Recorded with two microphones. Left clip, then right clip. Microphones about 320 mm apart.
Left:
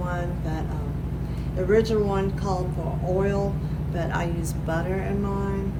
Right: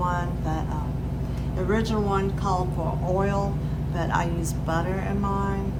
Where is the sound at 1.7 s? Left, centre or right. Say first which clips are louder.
Left 5 dB; centre.